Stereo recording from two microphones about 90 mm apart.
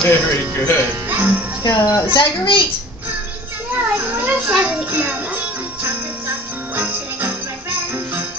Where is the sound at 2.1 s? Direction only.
70° left (ahead or behind).